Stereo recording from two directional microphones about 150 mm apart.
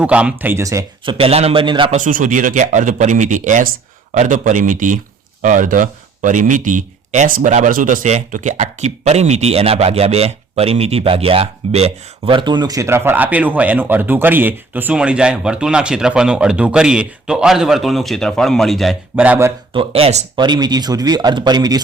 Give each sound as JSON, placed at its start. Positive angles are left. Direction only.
{"t": 0.0, "sound": "speech", "side_deg": -10}
{"t": 1.0, "sound": "a man's voice", "side_deg": -40}
{"t": 1.9, "sound": "speech", "side_deg": -60}
{"t": 19.1, "sound": "speech", "side_deg": -10}
{"t": 19.7, "sound": "a man's voice", "side_deg": -40}
{"t": 20.3, "sound": "speech", "side_deg": -30}